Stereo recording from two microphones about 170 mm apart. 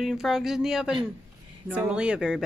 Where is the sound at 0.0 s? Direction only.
Centre (ahead or behind).